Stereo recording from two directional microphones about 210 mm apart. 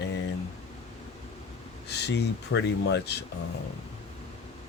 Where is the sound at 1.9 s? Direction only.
55° left (ahead or behind).